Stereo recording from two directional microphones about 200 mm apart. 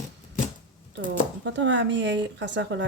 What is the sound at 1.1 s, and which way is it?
Speech, 65° right (ahead or behind).